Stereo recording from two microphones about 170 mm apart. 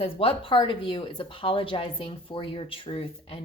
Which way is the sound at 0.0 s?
30° left (ahead or behind).